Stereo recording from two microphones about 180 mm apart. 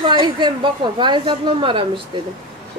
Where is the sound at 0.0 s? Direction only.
25° right (ahead or behind).